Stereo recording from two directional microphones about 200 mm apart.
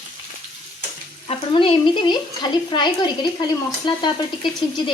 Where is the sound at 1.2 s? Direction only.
25° left (ahead or behind).